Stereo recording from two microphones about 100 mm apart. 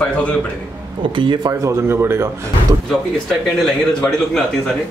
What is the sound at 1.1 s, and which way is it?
Speech, 55° right (ahead or behind).